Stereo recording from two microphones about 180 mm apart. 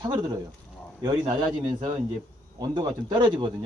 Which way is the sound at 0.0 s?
25° right (ahead or behind).